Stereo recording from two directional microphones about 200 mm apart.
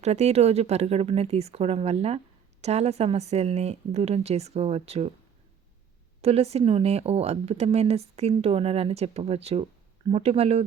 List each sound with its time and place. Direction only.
0.0 s speech: 35° right (ahead or behind)
6.2 s speech: 30° right (ahead or behind)